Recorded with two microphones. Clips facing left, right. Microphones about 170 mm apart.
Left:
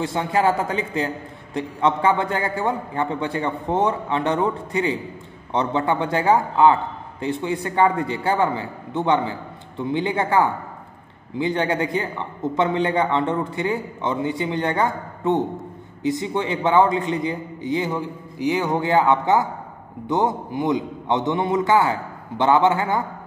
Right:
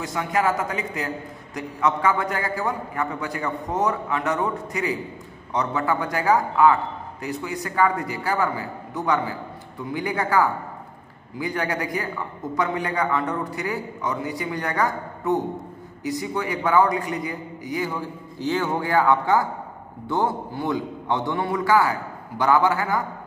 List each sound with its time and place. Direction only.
0.0 s a man's voice: 30° left (ahead or behind)